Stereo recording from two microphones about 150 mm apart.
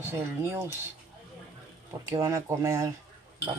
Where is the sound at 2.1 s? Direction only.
20° right (ahead or behind).